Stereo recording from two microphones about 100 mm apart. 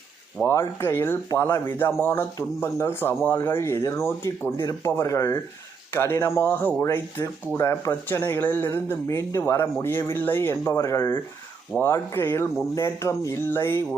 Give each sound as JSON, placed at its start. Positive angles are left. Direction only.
{"t": 0.4, "sound": "speech", "side_deg": 20}